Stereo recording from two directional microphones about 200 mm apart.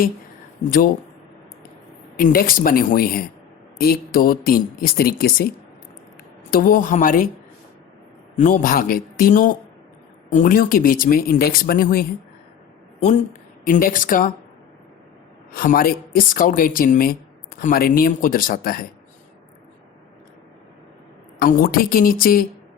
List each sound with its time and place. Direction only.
0.6 s a woman's voice: 45° left (ahead or behind)
2.1 s a woman's voice: 45° left (ahead or behind)
6.5 s a woman's voice: 45° left (ahead or behind)
8.4 s a woman's voice: 40° left (ahead or behind)
13.0 s a woman's voice: 35° left (ahead or behind)
15.5 s a woman's voice: 45° left (ahead or behind)
21.3 s a woman's voice: 45° left (ahead or behind)